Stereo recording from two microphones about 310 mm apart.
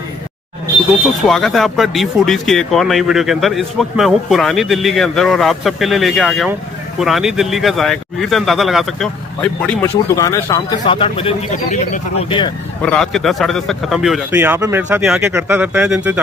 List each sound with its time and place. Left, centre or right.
1.3 s speech: centre
12.8 s speech: centre